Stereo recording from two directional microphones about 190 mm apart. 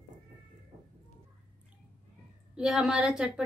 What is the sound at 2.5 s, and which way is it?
Speech, 5° right (ahead or behind).